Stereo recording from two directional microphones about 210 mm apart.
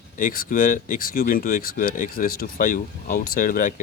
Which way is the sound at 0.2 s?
40° left (ahead or behind).